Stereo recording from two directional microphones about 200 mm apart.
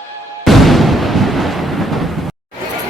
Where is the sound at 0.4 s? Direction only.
Centre (ahead or behind).